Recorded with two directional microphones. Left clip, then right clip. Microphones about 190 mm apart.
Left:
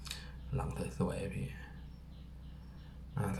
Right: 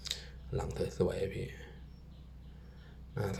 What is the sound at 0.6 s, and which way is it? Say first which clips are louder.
Speech: right 6 dB; 25° right (ahead or behind).